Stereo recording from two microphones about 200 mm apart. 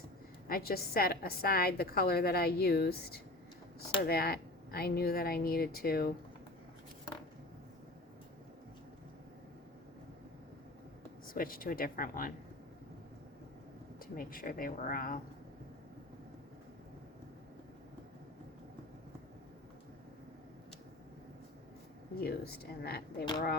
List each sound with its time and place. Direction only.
0.4 s a woman's voice: 50° left (ahead or behind)
11.3 s a woman's voice: 45° left (ahead or behind)
14.0 s a woman's voice: 45° left (ahead or behind)
22.2 s a woman's voice: 50° left (ahead or behind)